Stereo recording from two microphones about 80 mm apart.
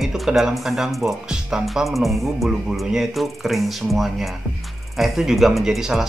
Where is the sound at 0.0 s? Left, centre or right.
Centre.